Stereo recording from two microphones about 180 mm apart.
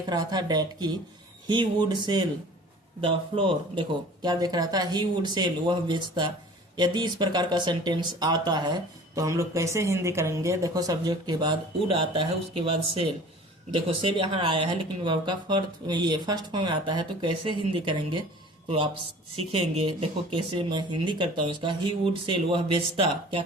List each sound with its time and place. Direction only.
0.1 s speech: 20° right (ahead or behind)
19.5 s speech: 35° right (ahead or behind)